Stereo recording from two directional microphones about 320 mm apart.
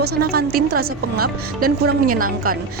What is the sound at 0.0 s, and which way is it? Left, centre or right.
A woman's voice, right.